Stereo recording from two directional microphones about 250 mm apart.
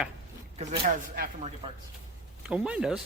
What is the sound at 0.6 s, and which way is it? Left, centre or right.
Speech, right.